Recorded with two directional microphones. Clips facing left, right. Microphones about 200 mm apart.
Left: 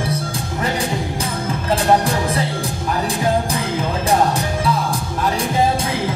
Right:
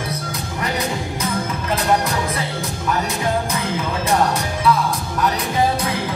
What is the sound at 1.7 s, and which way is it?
Music, 30° left (ahead or behind).